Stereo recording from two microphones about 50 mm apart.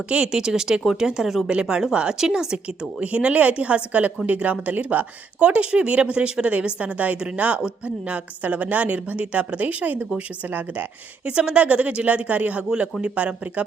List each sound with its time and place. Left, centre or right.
0.1 s a woman's voice: centre; by 10.8 s right
11.3 s a woman's voice: right